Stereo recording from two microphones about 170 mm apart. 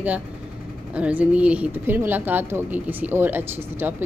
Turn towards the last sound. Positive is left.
turn(degrees=-10)  # may be behind; listen again after turning